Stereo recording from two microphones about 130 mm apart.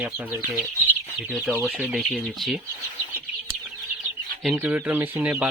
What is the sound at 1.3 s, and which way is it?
Speech, centre (ahead or behind).